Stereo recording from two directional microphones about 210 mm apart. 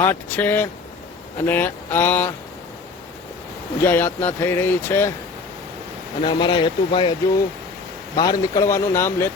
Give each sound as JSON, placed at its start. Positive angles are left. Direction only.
{"t": 0.0, "sound": "speech", "side_deg": 10}
{"t": 3.8, "sound": "speech", "side_deg": 10}
{"t": 6.2, "sound": "speech", "side_deg": 20}
{"t": 8.1, "sound": "speech", "side_deg": 20}